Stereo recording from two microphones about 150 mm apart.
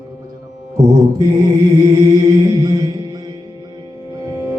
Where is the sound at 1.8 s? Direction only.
20° right (ahead or behind).